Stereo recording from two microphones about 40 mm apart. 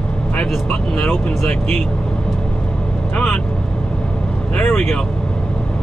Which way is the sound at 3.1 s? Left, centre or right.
Left.